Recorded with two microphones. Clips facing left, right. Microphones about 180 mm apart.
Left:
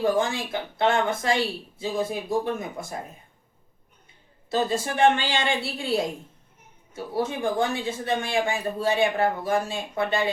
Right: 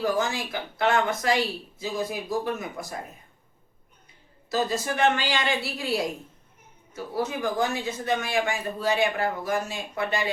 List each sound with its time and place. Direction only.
0.0 s speech: 25° left (ahead or behind)
4.4 s speech: 30° left (ahead or behind)
7.3 s speech: 25° left (ahead or behind)